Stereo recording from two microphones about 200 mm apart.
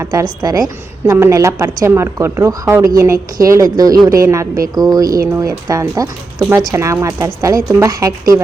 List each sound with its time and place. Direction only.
0.0 s a woman's voice: 15° right (ahead or behind)